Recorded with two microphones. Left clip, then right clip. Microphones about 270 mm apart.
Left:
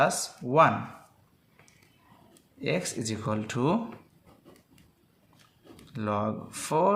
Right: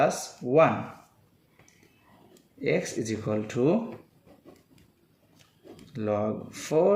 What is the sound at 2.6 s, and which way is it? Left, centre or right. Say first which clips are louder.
Speech: right 3 dB; left.